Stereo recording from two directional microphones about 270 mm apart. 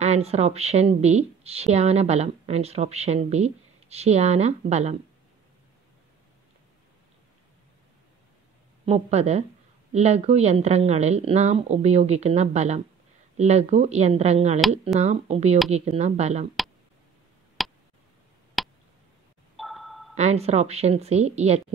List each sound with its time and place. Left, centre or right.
0.0 s a woman's voice: right
8.8 s a woman's voice: right
17.6 s tick: centre
18.6 s a sound: centre
20.2 s a woman's voice: right